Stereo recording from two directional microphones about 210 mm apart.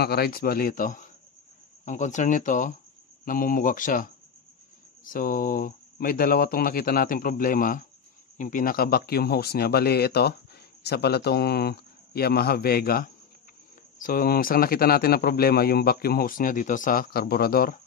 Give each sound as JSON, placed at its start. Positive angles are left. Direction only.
{"t": 0.0, "sound": "a man's voice", "side_deg": 50}
{"t": 14.0, "sound": "a man's voice", "side_deg": 45}